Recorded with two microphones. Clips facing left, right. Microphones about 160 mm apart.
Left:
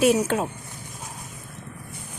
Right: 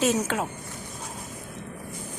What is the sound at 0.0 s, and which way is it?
Speech, 10° left (ahead or behind).